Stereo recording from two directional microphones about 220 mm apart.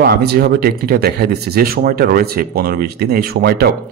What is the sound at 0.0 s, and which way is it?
Speech, 45° right (ahead or behind).